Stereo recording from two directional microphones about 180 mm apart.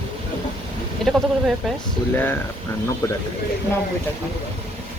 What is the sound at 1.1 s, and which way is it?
Speech, centre (ahead or behind).